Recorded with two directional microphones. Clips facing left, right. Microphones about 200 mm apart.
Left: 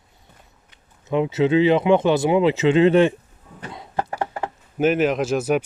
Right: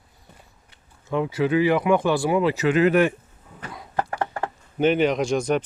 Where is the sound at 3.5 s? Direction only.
25° left (ahead or behind).